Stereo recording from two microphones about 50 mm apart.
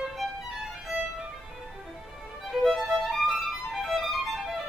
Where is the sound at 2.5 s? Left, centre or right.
Centre.